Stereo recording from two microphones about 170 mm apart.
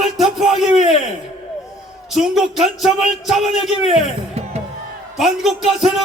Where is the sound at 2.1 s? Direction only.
Centre (ahead or behind).